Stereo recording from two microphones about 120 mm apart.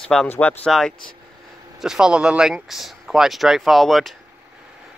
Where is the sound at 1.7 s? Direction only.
5° right (ahead or behind).